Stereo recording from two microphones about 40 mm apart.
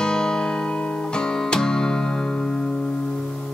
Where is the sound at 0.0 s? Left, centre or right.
Centre.